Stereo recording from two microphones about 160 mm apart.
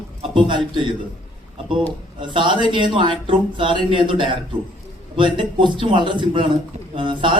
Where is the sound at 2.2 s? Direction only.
30° right (ahead or behind).